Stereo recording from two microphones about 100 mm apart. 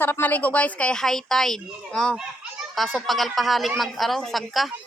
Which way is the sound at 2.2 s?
5° right (ahead or behind).